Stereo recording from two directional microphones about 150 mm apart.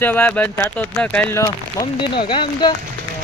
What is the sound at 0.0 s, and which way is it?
Speech, 10° left (ahead or behind).